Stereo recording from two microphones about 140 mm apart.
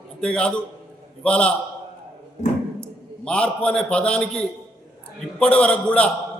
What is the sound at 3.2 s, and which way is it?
A man's voice, 5° left (ahead or behind).